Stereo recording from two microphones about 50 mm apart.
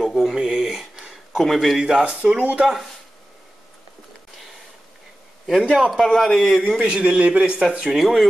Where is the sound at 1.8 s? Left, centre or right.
Right.